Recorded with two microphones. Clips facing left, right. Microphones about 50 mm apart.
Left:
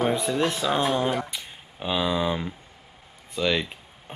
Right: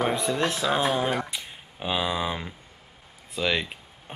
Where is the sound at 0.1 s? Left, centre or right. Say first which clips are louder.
Left 1 dB; centre.